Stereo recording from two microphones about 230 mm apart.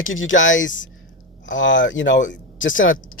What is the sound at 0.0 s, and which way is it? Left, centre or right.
Speech, left.